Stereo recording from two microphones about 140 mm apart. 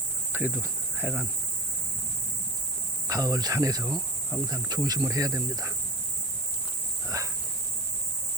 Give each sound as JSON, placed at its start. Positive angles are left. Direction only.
{"t": 0.3, "sound": "speech", "side_deg": -15}
{"t": 3.1, "sound": "speech", "side_deg": -25}
{"t": 7.1, "sound": "a sound", "side_deg": -25}